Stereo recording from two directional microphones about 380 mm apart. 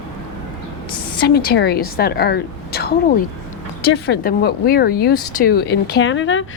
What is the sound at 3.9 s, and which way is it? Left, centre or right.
Speech, left.